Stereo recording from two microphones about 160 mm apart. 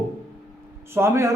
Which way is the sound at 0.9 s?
15° right (ahead or behind).